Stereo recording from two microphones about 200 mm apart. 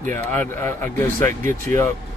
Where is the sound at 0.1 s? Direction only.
10° left (ahead or behind).